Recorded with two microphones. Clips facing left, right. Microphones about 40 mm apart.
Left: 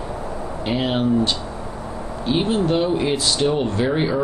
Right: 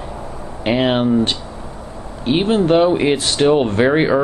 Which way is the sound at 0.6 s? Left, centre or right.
Right.